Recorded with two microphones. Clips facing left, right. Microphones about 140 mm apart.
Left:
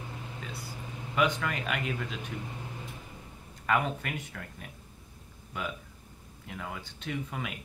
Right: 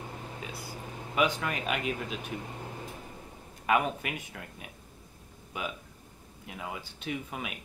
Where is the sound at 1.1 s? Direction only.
15° right (ahead or behind).